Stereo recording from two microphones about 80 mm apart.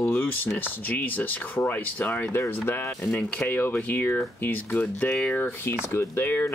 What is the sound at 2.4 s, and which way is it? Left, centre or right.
Speech, left.